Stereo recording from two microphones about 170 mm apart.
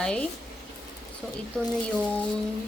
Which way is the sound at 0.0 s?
5° left (ahead or behind).